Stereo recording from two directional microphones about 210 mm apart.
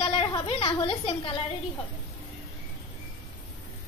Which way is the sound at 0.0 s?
25° left (ahead or behind).